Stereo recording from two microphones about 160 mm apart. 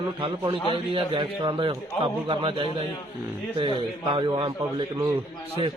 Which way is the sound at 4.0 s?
30° right (ahead or behind).